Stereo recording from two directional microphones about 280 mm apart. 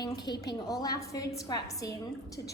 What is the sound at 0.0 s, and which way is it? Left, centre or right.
A woman's voice, centre.